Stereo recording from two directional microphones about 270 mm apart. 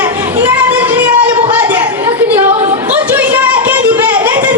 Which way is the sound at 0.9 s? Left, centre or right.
Centre.